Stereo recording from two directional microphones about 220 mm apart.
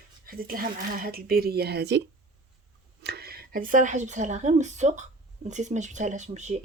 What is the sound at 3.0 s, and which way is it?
Speech, 45° right (ahead or behind).